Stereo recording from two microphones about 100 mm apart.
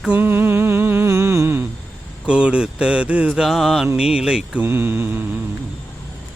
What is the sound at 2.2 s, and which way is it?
Speech, 10° right (ahead or behind).